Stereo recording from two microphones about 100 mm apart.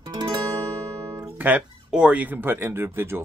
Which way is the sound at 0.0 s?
45° right (ahead or behind).